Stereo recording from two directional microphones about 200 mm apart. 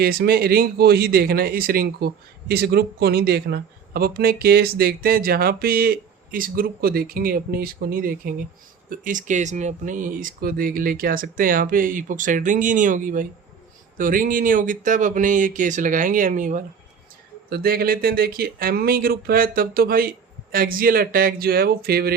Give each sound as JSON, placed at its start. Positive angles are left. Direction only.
{"t": 0.0, "sound": "speech", "side_deg": -50}